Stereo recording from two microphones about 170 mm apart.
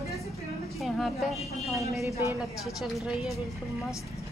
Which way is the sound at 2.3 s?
Centre (ahead or behind).